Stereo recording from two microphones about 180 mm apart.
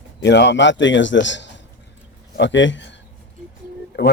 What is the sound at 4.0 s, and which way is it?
Speech, 70° left (ahead or behind).